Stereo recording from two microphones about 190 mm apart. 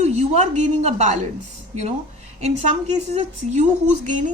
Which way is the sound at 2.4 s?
35° right (ahead or behind).